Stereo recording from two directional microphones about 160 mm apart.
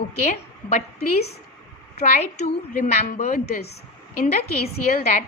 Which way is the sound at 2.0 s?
50° left (ahead or behind).